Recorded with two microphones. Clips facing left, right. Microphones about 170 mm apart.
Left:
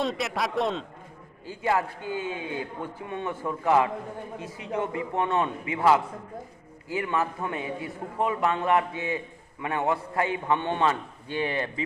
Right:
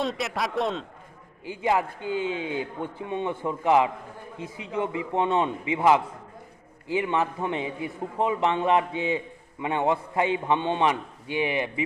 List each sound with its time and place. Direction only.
0.0 s a man's voice: centre (ahead or behind)
1.5 s a man's voice: 20° right (ahead or behind)